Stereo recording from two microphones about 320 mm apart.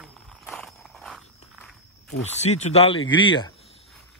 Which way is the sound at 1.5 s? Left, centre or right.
Centre.